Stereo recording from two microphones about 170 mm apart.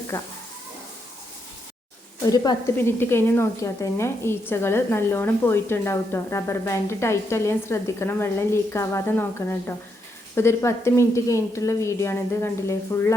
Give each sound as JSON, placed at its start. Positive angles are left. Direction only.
{"t": 0.1, "sound": "a woman's voice", "side_deg": 15}
{"t": 2.2, "sound": "a woman's voice", "side_deg": 25}